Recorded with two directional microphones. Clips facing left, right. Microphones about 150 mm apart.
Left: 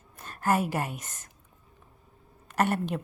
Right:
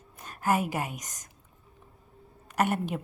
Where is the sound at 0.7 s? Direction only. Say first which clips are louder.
Left 1 dB; 15° right (ahead or behind).